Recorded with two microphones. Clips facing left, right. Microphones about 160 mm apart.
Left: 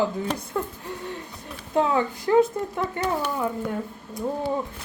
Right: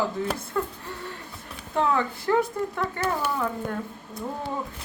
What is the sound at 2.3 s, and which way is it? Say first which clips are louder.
Speech: left 5 dB; 20° left (ahead or behind).